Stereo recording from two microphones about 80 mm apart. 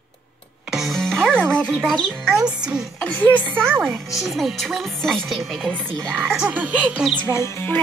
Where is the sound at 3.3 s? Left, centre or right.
Centre.